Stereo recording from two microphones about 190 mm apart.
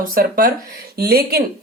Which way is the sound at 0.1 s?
50° right (ahead or behind).